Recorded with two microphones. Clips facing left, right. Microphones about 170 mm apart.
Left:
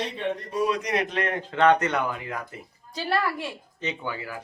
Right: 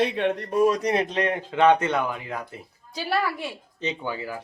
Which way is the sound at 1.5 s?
15° right (ahead or behind).